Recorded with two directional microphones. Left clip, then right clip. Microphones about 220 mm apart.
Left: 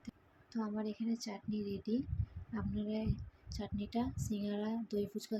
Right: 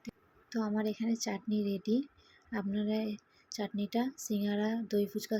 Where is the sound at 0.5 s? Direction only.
20° right (ahead or behind).